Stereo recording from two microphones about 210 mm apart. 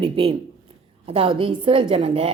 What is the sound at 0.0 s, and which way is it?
A woman's voice, 25° right (ahead or behind).